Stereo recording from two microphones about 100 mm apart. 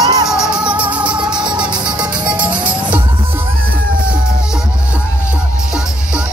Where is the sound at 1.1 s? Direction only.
50° right (ahead or behind).